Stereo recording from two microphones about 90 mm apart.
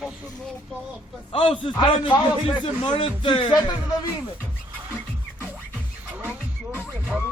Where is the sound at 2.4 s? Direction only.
75° left (ahead or behind).